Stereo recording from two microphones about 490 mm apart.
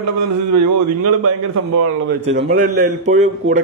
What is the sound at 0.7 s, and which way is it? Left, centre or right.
A man's voice, right.